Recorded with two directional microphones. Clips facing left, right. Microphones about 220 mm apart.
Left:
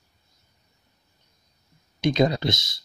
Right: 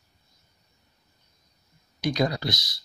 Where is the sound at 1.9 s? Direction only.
20° left (ahead or behind).